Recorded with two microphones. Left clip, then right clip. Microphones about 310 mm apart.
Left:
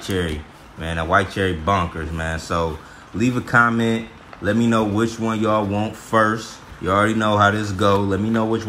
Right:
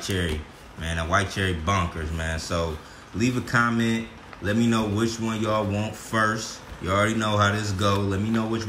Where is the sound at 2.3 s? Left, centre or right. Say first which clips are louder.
Left 5 dB; centre.